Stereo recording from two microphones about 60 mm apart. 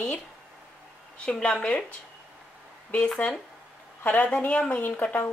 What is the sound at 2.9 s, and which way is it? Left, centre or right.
A woman's voice, left.